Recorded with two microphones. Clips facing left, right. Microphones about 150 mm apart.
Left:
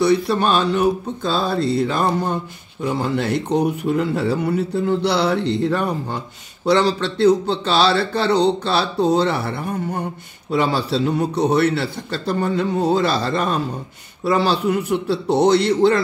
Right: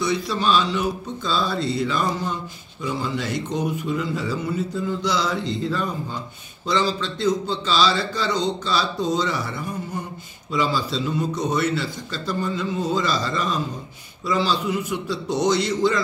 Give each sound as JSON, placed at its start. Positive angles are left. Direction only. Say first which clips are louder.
{"t": 0.0, "sound": "mantra", "louder": "left 6 dB", "side_deg": 60}